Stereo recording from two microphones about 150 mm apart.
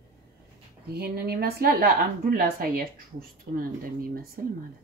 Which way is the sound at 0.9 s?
90° right.